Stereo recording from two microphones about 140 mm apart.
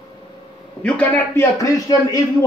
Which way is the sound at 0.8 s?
10° left (ahead or behind).